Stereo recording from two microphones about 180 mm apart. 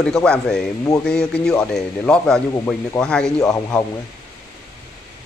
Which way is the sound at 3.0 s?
5° left (ahead or behind).